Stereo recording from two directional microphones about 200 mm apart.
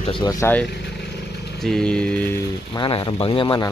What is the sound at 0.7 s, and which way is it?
Vehicle, 55° left (ahead or behind).